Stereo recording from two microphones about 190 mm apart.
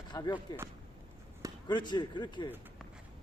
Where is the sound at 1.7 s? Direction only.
25° left (ahead or behind).